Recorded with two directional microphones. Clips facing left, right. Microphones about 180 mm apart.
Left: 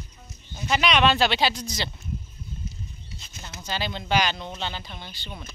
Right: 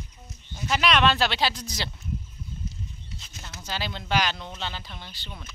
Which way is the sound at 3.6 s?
5° right (ahead or behind).